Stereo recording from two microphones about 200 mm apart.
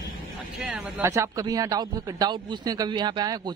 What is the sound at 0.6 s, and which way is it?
A man's voice, 10° right (ahead or behind).